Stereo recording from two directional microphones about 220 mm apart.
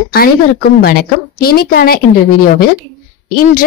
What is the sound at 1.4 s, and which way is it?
Speech, 45° left (ahead or behind).